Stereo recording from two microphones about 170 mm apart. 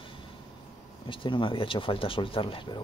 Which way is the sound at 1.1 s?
30° left (ahead or behind).